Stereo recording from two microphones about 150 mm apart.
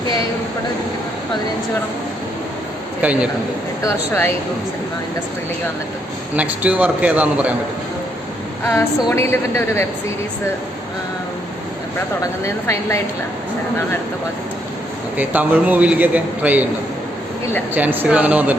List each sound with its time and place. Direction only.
3.0 s a man's voice: 10° right (ahead or behind)
3.8 s a woman's voice: 15° left (ahead or behind)
6.3 s a man's voice: 10° right (ahead or behind)
8.6 s a woman's voice: 15° left (ahead or behind)
12.2 s a woman's voice: 20° left (ahead or behind)
15.2 s a man's voice: 10° right (ahead or behind)
17.7 s a man's voice: 10° right (ahead or behind)